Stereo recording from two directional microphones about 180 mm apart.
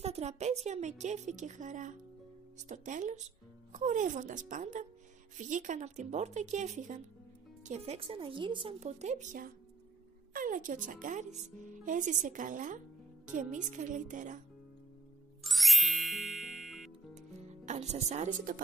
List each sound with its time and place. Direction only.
0.0 s a woman's voice: 35° right (ahead or behind)
10.3 s a sound: 50° right (ahead or behind)
10.9 s speech: 45° right (ahead or behind)
15.4 s music: centre (ahead or behind)
17.6 s speech: 40° right (ahead or behind)